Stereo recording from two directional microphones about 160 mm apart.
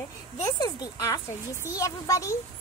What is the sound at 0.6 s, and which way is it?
A woman's voice, 25° left (ahead or behind).